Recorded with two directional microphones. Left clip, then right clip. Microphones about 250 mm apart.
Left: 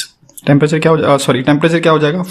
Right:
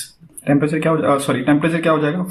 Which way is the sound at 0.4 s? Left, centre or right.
Left.